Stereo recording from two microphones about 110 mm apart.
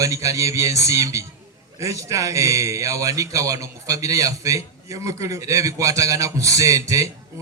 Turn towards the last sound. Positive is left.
turn(degrees=-30)  # may be behind; listen again after turning